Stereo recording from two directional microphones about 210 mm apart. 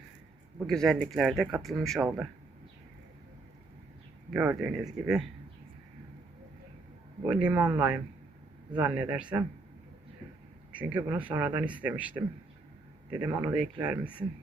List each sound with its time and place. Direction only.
0.7 s speech: centre (ahead or behind)
4.3 s speech: 5° right (ahead or behind)
7.3 s speech: 5° right (ahead or behind)
10.7 s speech: 5° right (ahead or behind)